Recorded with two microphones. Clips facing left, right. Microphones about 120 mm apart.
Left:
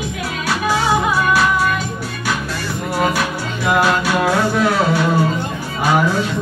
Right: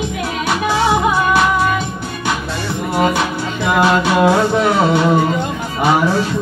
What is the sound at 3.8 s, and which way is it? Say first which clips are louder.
Music: right 7 dB; 25° right (ahead or behind).